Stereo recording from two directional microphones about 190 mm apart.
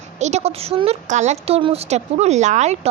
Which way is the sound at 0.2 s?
35° right (ahead or behind).